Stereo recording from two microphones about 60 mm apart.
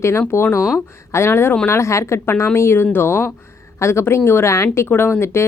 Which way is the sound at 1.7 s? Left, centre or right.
Left.